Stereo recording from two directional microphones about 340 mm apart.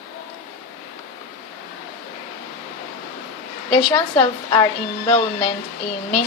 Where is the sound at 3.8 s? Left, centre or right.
Centre.